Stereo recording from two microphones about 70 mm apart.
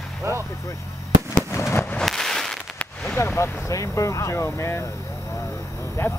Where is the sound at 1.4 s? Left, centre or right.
Left.